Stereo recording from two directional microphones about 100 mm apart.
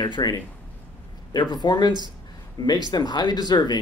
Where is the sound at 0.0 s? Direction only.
45° left (ahead or behind).